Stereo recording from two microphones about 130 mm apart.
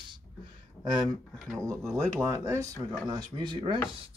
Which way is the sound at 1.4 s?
Centre (ahead or behind).